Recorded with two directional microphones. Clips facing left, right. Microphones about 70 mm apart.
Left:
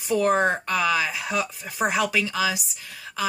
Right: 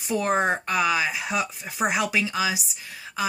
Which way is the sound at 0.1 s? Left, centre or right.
Centre.